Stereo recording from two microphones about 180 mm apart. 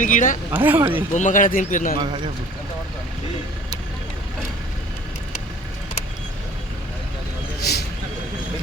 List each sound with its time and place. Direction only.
0.0 s speech: 45° left (ahead or behind)
0.5 s speech: 10° right (ahead or behind)
1.1 s speech: 45° left (ahead or behind)